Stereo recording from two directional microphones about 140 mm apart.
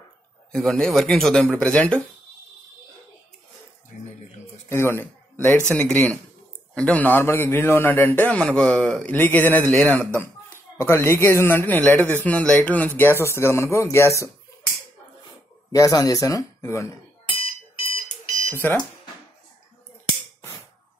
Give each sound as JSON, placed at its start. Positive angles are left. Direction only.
{"t": 0.5, "sound": "speech", "side_deg": 5}
{"t": 4.6, "sound": "speech", "side_deg": 15}
{"t": 15.7, "sound": "speech", "side_deg": 25}
{"t": 18.5, "sound": "speech", "side_deg": 15}